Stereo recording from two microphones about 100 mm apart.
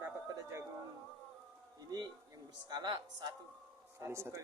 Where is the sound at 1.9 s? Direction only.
40° right (ahead or behind).